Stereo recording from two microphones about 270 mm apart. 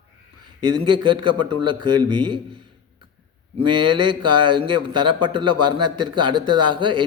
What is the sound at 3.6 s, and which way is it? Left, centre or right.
Speech, right.